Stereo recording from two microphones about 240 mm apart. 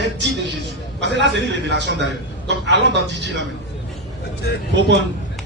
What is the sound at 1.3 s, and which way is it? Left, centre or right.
A man's voice, right.